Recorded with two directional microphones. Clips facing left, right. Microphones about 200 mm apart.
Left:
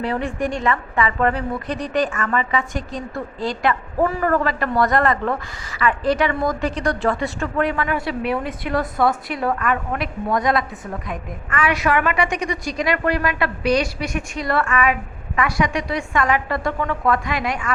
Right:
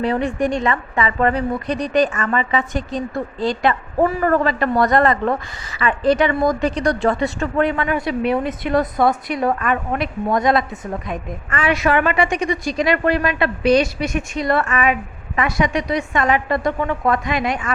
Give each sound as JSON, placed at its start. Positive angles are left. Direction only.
{"t": 0.0, "sound": "a woman's voice", "side_deg": -20}